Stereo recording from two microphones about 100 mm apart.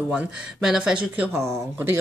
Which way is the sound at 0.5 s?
5° right (ahead or behind).